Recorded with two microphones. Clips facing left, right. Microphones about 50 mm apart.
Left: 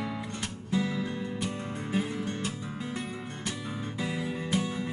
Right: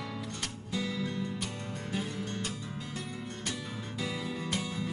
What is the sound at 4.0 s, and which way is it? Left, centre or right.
Music, left.